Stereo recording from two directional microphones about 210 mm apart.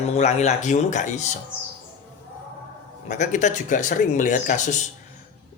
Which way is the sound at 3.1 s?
35° left (ahead or behind).